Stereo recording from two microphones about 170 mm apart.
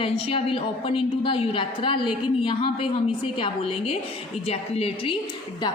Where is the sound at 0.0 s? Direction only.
30° left (ahead or behind).